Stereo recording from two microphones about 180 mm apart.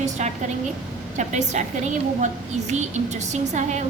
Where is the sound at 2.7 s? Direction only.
40° right (ahead or behind).